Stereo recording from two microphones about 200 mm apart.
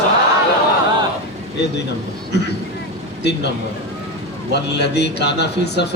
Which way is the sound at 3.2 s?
55° left (ahead or behind).